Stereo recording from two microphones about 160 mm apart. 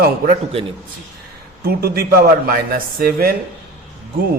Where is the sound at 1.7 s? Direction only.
75° right (ahead or behind).